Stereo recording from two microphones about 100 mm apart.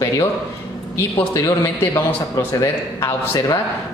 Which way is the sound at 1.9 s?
35° left (ahead or behind).